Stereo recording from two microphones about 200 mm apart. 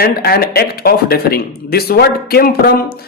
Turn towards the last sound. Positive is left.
turn(degrees=50)  # may be behind; listen again after turning